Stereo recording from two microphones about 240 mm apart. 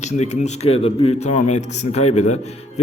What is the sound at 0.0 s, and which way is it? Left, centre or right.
A man's voice, left.